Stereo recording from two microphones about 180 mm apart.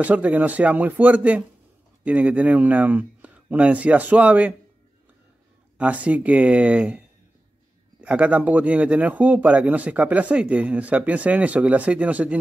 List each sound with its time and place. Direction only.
0.0 s speech: 10° right (ahead or behind)
5.8 s speech: 10° right (ahead or behind)